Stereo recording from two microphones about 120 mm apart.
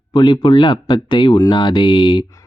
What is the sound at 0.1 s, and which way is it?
Speech, 40° left (ahead or behind).